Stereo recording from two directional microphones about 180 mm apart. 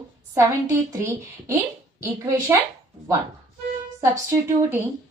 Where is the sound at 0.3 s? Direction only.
15° right (ahead or behind).